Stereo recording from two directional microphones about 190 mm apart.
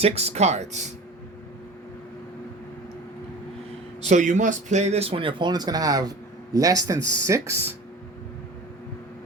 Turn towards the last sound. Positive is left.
turn(degrees=-15)  # may be behind; listen again after turning